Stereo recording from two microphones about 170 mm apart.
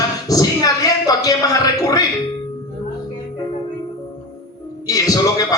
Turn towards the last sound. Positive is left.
turn(degrees=20)  # may be behind; listen again after turning